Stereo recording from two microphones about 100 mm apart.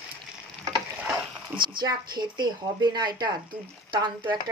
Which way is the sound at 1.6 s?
50° right (ahead or behind).